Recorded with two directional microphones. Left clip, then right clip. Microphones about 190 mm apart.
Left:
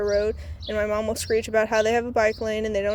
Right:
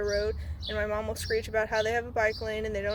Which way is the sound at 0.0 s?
30° left (ahead or behind).